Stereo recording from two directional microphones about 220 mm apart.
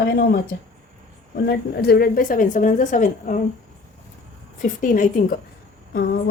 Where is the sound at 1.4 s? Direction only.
45° left (ahead or behind).